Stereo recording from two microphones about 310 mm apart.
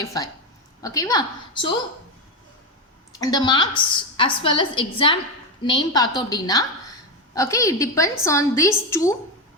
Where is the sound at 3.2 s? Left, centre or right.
Centre.